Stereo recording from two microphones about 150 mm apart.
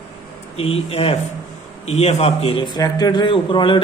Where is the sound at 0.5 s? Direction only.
40° left (ahead or behind).